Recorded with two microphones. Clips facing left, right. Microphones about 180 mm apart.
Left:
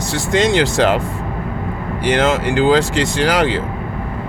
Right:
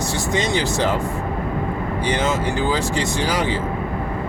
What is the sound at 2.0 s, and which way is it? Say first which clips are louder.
Speech: left 6 dB; 90° left.